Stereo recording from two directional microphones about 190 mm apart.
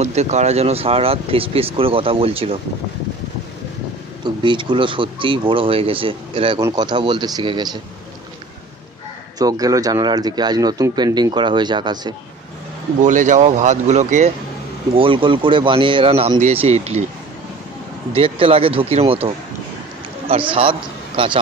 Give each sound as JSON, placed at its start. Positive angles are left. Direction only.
{"t": 0.0, "sound": "speech", "side_deg": -35}
{"t": 4.2, "sound": "speech", "side_deg": -25}
{"t": 9.4, "sound": "speech", "side_deg": -20}
{"t": 13.0, "sound": "speech", "side_deg": -40}
{"t": 15.0, "sound": "speech", "side_deg": -25}
{"t": 18.1, "sound": "speech", "side_deg": -30}